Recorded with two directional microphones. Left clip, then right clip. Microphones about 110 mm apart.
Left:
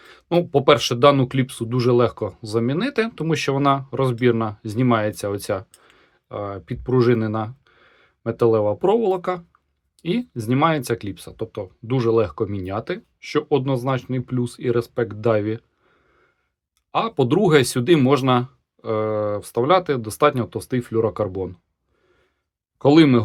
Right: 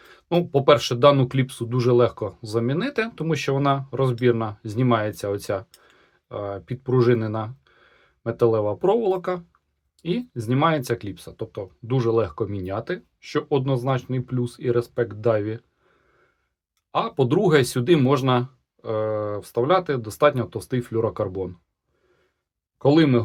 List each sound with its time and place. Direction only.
0.0 s speech: 40° left (ahead or behind)
16.9 s speech: 35° left (ahead or behind)
22.8 s speech: 50° left (ahead or behind)